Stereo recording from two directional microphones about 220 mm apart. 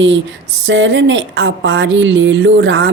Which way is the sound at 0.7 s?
55° right (ahead or behind).